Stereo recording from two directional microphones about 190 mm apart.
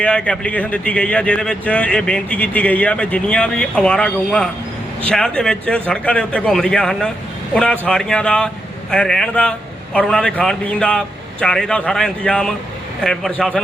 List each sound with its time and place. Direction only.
0.0 s a man's voice: 5° left (ahead or behind)